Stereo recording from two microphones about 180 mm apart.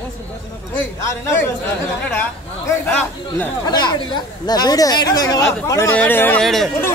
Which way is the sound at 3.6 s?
25° left (ahead or behind).